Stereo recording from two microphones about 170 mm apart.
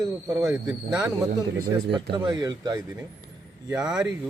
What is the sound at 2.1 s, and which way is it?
Speech, 25° right (ahead or behind).